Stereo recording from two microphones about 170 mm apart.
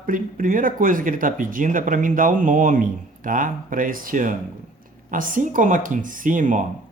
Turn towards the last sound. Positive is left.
turn(degrees=-50)  # may be behind; listen again after turning